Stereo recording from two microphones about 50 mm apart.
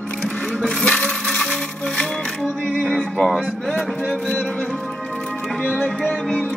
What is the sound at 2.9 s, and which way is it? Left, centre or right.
Music, centre.